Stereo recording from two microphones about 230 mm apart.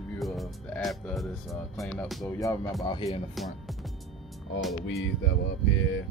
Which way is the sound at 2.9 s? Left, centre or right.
Left.